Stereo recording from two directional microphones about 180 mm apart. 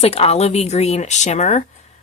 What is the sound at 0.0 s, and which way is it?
Speech, 35° left (ahead or behind).